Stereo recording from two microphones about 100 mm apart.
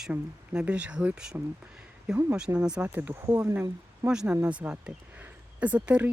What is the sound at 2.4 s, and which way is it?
Speech, 10° right (ahead or behind).